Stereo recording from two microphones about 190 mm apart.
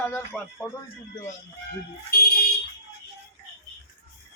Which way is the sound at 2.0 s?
55° left (ahead or behind).